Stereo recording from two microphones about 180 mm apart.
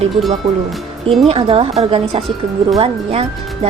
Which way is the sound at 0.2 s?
35° right (ahead or behind).